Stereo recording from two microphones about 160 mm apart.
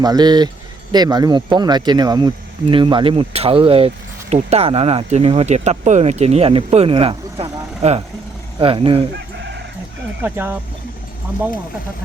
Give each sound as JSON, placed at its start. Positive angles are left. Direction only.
{"t": 0.0, "sound": "speech", "side_deg": -25}
{"t": 10.2, "sound": "speech", "side_deg": -10}